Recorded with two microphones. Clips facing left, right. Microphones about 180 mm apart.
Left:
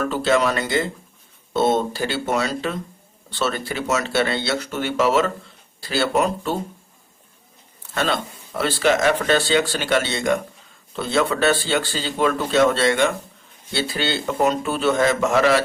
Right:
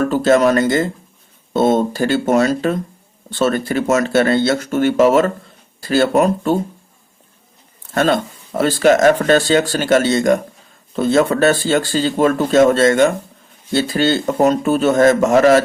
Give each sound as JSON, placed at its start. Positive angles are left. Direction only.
{"t": 0.0, "sound": "speech", "side_deg": -45}
{"t": 7.9, "sound": "speech", "side_deg": -45}